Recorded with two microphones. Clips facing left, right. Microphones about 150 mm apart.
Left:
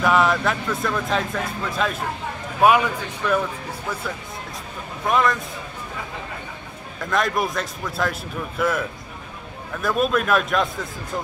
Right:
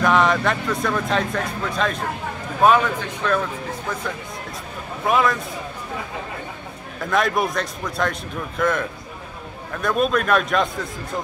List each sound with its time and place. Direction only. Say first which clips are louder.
0.0 s a man's voice: right 1 dB; 5° left (ahead or behind)
5.0 s speech: right 1 dB; centre (ahead or behind)
7.0 s speech: right 2 dB; centre (ahead or behind)